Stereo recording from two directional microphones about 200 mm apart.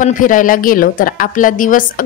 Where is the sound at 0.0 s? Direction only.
40° left (ahead or behind).